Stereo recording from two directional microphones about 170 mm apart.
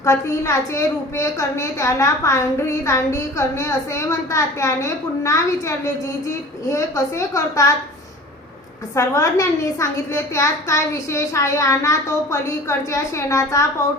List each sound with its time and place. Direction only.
0.0 s a woman's voice: 20° left (ahead or behind)
9.0 s a woman's voice: 20° left (ahead or behind)